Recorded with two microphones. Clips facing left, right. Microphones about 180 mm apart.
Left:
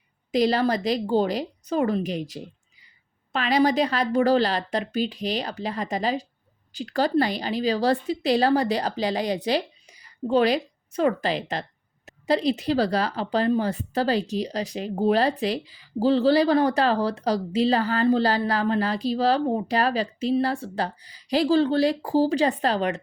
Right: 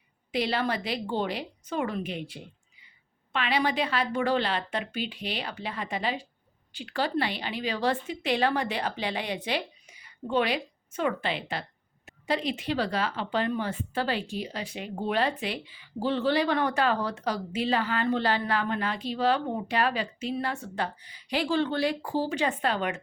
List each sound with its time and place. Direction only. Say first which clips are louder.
0.3 s speech: left 7 dB; 40° left (ahead or behind)